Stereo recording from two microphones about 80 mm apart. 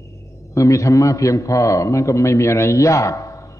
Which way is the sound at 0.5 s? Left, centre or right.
Left.